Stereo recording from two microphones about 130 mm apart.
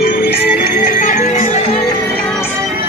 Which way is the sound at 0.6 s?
90° left.